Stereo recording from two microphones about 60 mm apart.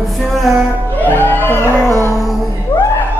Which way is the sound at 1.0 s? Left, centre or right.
Left.